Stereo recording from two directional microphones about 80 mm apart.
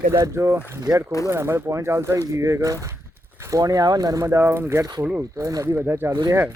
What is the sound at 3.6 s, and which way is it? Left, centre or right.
Speech, right.